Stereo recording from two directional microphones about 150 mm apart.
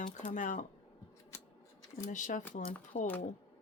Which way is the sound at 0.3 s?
60° left (ahead or behind).